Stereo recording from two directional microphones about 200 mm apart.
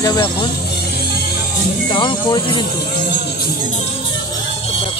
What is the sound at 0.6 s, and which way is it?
Music, 55° left (ahead or behind).